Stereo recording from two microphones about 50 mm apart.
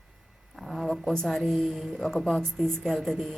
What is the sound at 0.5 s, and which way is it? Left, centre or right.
A woman's voice, centre.